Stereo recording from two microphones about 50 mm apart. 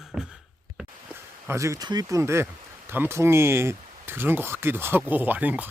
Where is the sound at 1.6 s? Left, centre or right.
Right.